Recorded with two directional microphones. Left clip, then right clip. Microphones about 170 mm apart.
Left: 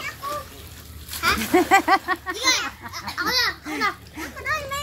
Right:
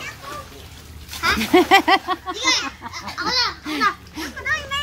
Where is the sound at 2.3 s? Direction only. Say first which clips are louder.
Right 2 dB; 35° left (ahead or behind).